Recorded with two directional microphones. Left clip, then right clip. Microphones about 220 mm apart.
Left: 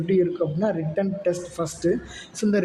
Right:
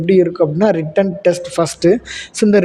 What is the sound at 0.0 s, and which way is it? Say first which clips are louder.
A man's voice: right 10 dB; 40° right (ahead or behind).